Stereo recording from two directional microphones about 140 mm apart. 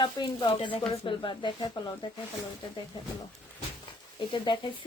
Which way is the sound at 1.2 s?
35° left (ahead or behind).